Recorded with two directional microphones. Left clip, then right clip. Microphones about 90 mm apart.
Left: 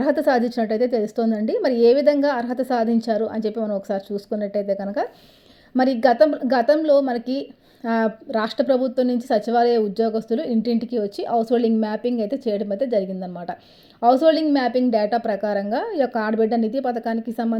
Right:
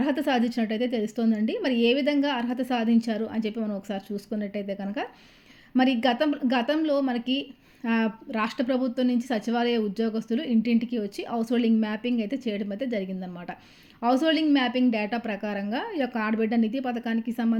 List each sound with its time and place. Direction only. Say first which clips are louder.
0.0 s a woman's voice: left 7 dB; 30° left (ahead or behind)